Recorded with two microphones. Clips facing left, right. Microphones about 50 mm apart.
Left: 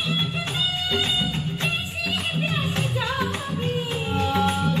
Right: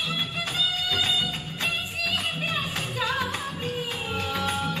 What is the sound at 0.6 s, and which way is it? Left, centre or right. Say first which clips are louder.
Music: left 1 dB; left.